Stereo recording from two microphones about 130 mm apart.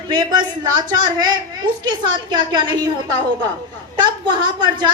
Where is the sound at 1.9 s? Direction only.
35° right (ahead or behind).